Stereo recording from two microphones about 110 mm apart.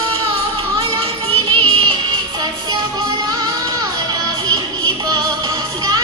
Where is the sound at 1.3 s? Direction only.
55° right (ahead or behind).